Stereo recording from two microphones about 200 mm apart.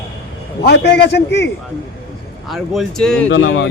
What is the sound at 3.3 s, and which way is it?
Speech, 70° left (ahead or behind).